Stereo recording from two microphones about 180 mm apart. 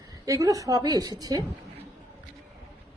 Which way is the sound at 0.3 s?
20° right (ahead or behind).